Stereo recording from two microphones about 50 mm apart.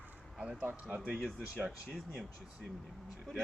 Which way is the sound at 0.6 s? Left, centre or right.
Right.